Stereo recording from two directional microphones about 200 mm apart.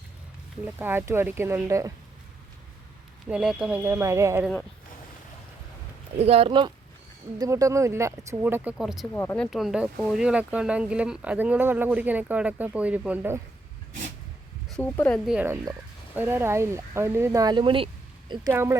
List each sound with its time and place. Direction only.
0.6 s speech: 10° right (ahead or behind)
3.2 s speech: 5° right (ahead or behind)
6.1 s speech: 30° right (ahead or behind); by 9.0 s centre (ahead or behind)
9.1 s speech: 10° left (ahead or behind); by 13.4 s 10° right (ahead or behind)
14.7 s speech: 10° left (ahead or behind)
15.3 s speech: 5° right (ahead or behind)